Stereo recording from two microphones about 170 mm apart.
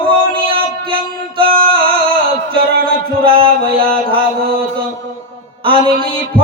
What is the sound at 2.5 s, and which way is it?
Music, 60° right (ahead or behind).